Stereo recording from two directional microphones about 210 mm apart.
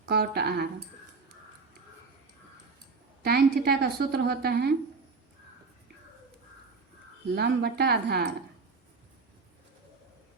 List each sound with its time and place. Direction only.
0.1 s a woman's voice: 50° right (ahead or behind)
3.2 s a woman's voice: 50° right (ahead or behind)
7.3 s a woman's voice: 50° right (ahead or behind)